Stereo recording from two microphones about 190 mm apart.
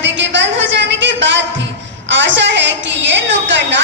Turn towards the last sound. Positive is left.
turn(degrees=-70)  # may be behind; listen again after turning